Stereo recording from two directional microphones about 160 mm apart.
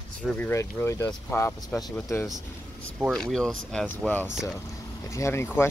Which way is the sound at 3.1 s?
5° left (ahead or behind).